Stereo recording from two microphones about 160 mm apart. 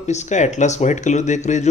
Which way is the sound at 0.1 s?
45° left (ahead or behind).